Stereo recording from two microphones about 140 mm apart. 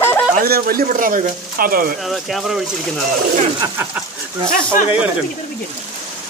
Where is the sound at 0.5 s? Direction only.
90° right.